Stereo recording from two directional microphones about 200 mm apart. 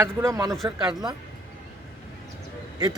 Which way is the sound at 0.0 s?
15° right (ahead or behind).